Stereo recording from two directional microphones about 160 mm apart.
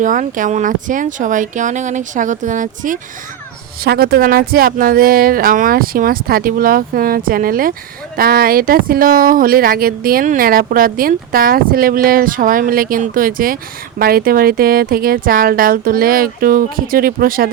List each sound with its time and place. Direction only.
0.0 s speech: 55° right (ahead or behind)
3.8 s speech: 70° right (ahead or behind)